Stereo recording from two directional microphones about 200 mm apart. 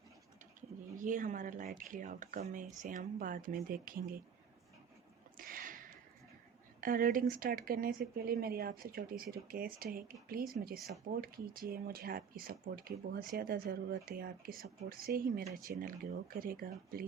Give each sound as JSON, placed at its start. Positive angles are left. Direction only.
{"t": 0.9, "sound": "speech", "side_deg": -40}
{"t": 5.4, "sound": "a sound", "side_deg": -45}
{"t": 6.8, "sound": "speech", "side_deg": -45}